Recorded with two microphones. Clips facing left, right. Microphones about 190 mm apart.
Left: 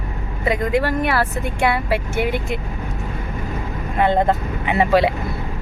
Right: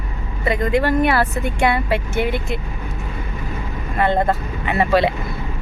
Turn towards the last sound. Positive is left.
turn(degrees=15)  # may be behind; listen again after turning